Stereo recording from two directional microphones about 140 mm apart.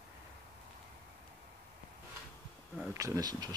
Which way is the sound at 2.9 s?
25° right (ahead or behind).